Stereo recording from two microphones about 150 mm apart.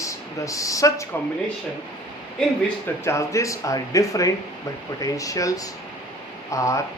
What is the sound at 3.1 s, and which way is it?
Speech, 20° left (ahead or behind).